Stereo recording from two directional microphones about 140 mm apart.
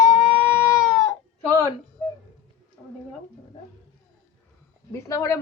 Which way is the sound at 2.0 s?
10° left (ahead or behind).